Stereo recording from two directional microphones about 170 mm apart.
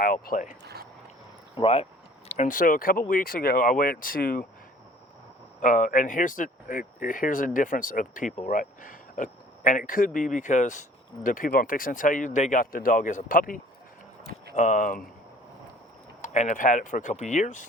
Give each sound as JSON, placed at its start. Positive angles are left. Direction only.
{"t": 0.0, "sound": "speech", "side_deg": 55}
{"t": 0.6, "sound": "a sound", "side_deg": -70}
{"t": 1.5, "sound": "speech", "side_deg": 35}
{"t": 2.3, "sound": "speech", "side_deg": 50}
{"t": 5.5, "sound": "speech", "side_deg": 50}
{"t": 16.2, "sound": "speech", "side_deg": 45}